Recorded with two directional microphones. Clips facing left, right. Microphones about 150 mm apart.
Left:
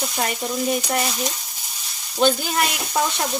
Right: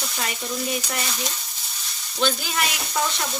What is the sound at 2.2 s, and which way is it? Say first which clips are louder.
Speech: left 5 dB; 45° left (ahead or behind).